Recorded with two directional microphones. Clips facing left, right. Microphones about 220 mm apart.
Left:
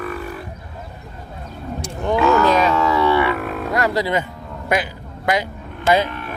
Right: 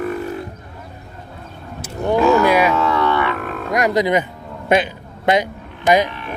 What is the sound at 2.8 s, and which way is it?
Roaring cats, 5° left (ahead or behind).